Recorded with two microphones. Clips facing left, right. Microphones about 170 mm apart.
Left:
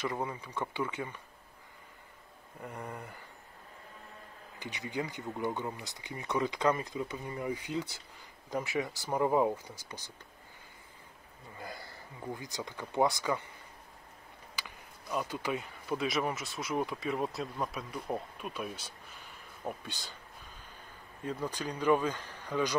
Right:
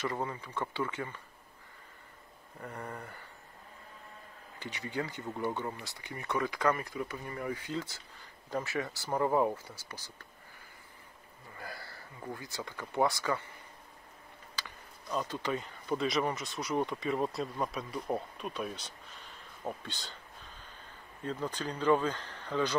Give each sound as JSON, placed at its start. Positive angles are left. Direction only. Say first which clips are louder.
{"t": 0.0, "sound": "speech", "louder": "even", "side_deg": 15}
{"t": 2.6, "sound": "speech", "louder": "even", "side_deg": 15}
{"t": 4.6, "sound": "speech", "louder": "even", "side_deg": 15}
{"t": 11.5, "sound": "speech", "louder": "left 1 dB", "side_deg": 20}
{"t": 14.5, "sound": "speech", "louder": "even", "side_deg": 10}
{"t": 21.3, "sound": "speech", "louder": "even", "side_deg": 10}